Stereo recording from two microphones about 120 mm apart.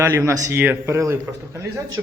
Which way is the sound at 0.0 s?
20° right (ahead or behind).